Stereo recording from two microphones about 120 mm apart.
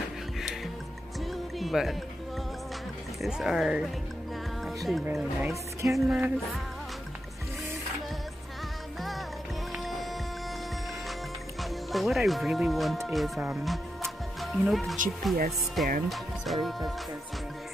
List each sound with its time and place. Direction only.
1.6 s music: centre (ahead or behind)
3.2 s speech: 5° right (ahead or behind)
5.5 s music: 25° right (ahead or behind)
5.9 s speech: 5° right (ahead or behind)
11.9 s speech: centre (ahead or behind)